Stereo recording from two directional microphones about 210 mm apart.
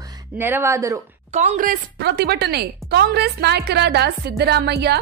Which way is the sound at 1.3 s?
35° right (ahead or behind).